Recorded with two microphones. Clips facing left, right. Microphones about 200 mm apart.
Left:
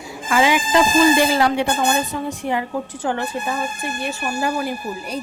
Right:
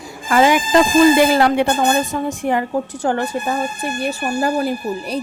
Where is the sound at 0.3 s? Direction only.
45° right (ahead or behind).